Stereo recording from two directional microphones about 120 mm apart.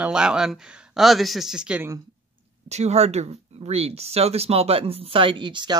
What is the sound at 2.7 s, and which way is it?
Speech, 65° right (ahead or behind).